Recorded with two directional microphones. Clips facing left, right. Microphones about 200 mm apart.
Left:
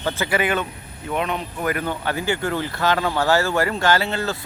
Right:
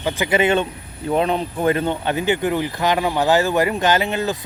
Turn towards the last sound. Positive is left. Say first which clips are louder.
# right 2 dB
turn(degrees=-15)  # may be behind; listen again after turning